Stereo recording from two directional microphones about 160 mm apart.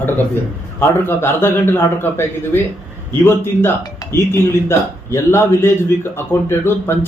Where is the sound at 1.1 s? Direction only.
15° left (ahead or behind).